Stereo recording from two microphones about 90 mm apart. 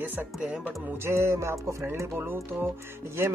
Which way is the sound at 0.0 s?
20° right (ahead or behind).